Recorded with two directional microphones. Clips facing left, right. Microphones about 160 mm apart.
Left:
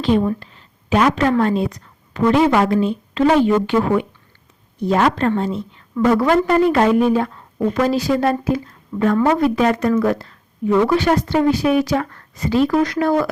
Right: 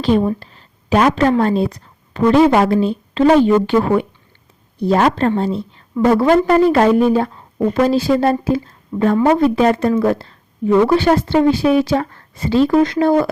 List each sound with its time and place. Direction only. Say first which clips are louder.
0.0 s a woman's voice: right 2 dB; 35° right (ahead or behind)